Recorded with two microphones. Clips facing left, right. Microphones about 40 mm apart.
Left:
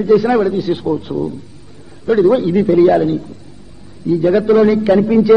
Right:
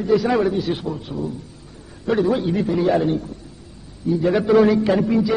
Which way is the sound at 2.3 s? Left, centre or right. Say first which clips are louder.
Left 8 dB; left.